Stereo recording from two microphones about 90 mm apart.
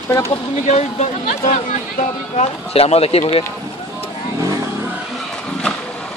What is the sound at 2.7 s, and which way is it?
Speech, 90° left.